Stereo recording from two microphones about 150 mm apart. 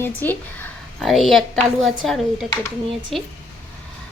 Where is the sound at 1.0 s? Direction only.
Centre (ahead or behind).